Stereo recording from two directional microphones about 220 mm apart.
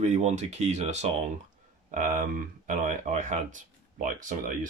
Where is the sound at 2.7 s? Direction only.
35° right (ahead or behind).